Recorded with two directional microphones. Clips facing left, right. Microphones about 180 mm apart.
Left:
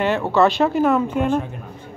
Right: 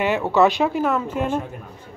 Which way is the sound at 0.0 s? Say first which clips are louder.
Even; 5° right (ahead or behind).